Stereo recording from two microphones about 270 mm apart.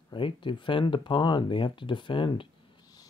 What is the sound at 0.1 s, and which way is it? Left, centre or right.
Speech, centre.